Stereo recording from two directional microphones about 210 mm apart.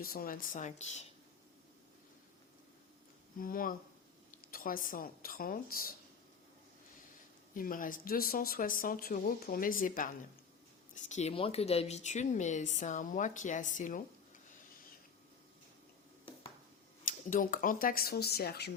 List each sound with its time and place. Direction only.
0.0 s speech: 45° left (ahead or behind)
3.3 s speech: 40° left (ahead or behind)
7.5 s speech: 40° left (ahead or behind)
17.1 s speech: 40° left (ahead or behind)